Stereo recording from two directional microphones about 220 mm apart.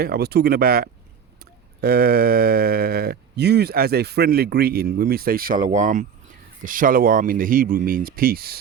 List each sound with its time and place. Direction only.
0.0 s speech: 45° right (ahead or behind)